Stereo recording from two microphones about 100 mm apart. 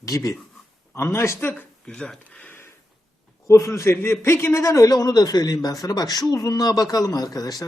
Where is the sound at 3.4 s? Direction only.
30° left (ahead or behind).